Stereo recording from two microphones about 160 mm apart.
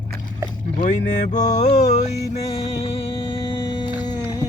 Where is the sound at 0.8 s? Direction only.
50° left (ahead or behind); by 4.2 s 30° left (ahead or behind).